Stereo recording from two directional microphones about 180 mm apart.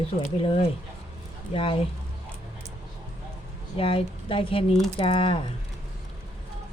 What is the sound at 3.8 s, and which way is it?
Speech, 30° left (ahead or behind).